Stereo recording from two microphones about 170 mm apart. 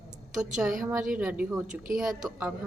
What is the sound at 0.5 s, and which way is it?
A woman's voice, centre (ahead or behind).